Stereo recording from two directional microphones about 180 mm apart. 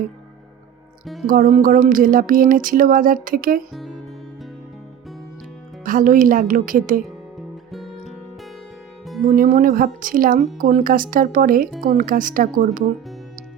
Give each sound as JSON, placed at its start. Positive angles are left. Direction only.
{"t": 1.0, "sound": "speech", "side_deg": 0}
{"t": 1.3, "sound": "speech", "side_deg": -40}
{"t": 3.7, "sound": "speech", "side_deg": 0}
{"t": 5.8, "sound": "speech", "side_deg": -50}
{"t": 7.3, "sound": "music", "side_deg": 0}
{"t": 9.2, "sound": "speech", "side_deg": -45}